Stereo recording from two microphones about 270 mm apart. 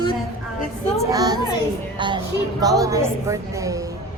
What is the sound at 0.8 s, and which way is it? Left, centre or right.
A woman's voice, centre.